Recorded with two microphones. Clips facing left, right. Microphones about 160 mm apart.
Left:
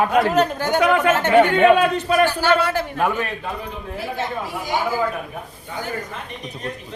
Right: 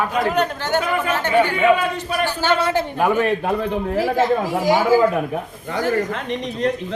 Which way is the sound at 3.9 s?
90° right.